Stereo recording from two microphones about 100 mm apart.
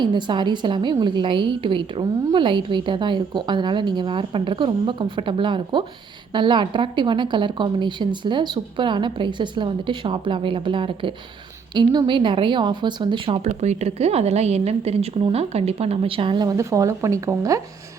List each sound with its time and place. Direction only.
0.0 s a woman's voice: 50° right (ahead or behind)
16.4 s speech: 35° right (ahead or behind)